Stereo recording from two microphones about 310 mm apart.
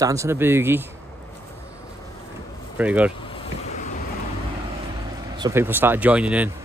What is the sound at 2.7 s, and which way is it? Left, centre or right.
Speech, centre.